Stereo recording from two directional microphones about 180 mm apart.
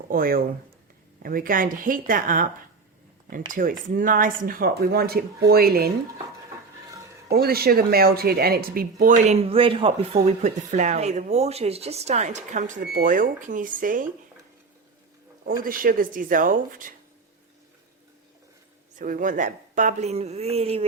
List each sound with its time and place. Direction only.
0.1 s speech: 55° right (ahead or behind)
3.5 s speech: 50° right (ahead or behind)
7.3 s speech: 60° right (ahead or behind)
15.4 s speech: 50° right (ahead or behind)
18.9 s a woman's voice: 50° right (ahead or behind); by 20.8 s 35° right (ahead or behind)